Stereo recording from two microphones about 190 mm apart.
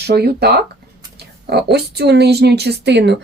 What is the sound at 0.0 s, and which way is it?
Speech, 60° right (ahead or behind).